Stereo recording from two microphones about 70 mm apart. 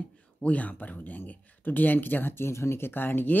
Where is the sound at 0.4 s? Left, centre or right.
Left.